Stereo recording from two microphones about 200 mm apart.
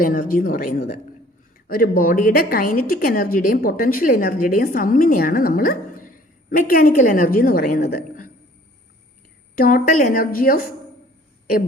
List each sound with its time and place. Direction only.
0.0 s a woman's voice: 45° left (ahead or behind)
9.6 s a woman's voice: 45° left (ahead or behind)